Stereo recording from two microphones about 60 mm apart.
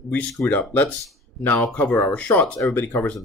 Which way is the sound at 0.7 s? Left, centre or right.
Left.